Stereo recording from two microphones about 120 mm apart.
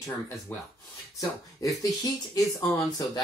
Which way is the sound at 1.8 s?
30° left (ahead or behind).